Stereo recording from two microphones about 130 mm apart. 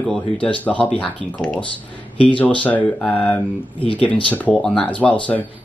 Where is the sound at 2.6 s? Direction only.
10° left (ahead or behind).